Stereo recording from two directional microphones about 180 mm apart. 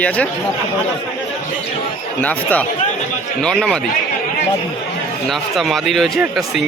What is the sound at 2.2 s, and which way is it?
Speech, 10° left (ahead or behind).